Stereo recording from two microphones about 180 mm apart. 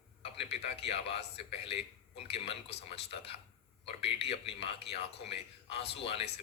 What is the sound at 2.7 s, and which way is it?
Speech, 65° left (ahead or behind).